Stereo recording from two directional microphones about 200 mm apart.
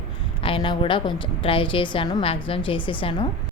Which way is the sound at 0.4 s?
25° left (ahead or behind).